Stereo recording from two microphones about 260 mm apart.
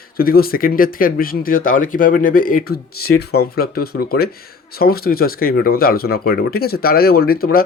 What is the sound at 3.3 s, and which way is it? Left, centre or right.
Speech, left.